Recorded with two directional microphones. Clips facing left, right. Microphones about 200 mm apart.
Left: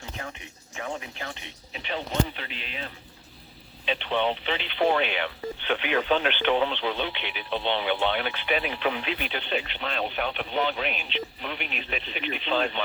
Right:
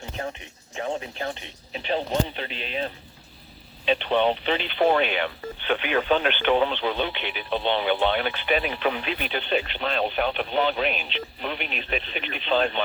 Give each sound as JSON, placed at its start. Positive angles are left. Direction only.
{"t": 0.8, "sound": "speech", "side_deg": -30}
{"t": 3.8, "sound": "speech", "side_deg": -45}